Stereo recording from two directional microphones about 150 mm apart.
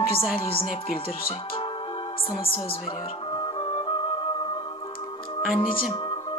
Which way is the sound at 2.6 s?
40° left (ahead or behind).